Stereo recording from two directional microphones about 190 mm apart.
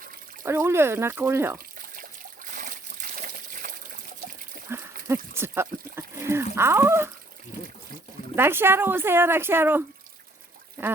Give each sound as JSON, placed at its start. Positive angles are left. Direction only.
{"t": 0.4, "sound": "speech", "side_deg": -15}
{"t": 2.0, "sound": "water", "side_deg": -45}
{"t": 4.7, "sound": "goat", "side_deg": -10}
{"t": 5.0, "sound": "speech", "side_deg": -10}
{"t": 8.4, "sound": "speech", "side_deg": -10}